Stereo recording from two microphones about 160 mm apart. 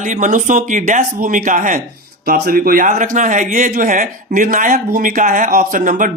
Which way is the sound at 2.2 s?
65° right (ahead or behind).